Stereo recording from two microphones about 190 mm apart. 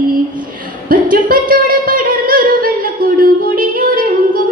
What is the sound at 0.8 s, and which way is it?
Singing, 45° right (ahead or behind).